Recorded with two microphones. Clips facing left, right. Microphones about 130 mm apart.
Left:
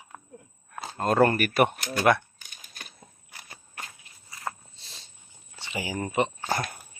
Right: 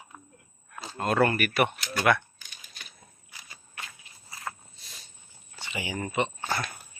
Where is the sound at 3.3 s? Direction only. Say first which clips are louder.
Left 3 dB; 55° left (ahead or behind).